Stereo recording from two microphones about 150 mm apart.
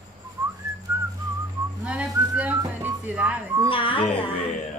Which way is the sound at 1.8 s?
5° right (ahead or behind).